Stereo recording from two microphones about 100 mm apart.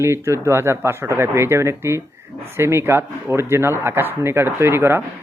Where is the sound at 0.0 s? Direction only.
25° right (ahead or behind).